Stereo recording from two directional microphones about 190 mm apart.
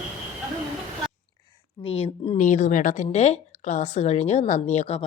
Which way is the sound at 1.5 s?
30° left (ahead or behind).